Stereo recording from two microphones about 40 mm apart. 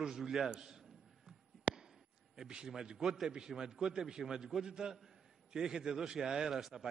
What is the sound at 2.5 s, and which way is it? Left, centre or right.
A man's voice, right.